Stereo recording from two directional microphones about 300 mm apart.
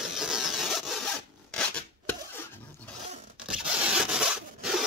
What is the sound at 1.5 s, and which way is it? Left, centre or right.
Filing, centre.